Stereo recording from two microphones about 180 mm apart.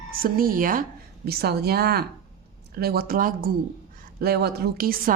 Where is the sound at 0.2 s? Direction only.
55° right (ahead or behind).